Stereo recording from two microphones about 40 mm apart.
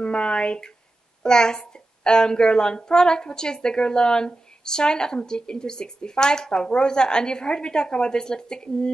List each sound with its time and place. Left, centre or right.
0.0 s a woman's voice: left